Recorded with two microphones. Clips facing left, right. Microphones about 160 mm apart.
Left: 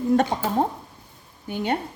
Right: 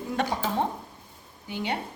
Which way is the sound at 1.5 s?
50° left (ahead or behind).